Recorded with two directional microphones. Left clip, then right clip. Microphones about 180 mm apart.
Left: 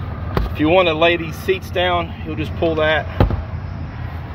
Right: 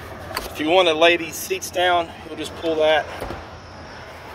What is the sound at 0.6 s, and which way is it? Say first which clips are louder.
Speech: left 2 dB; 10° right (ahead or behind).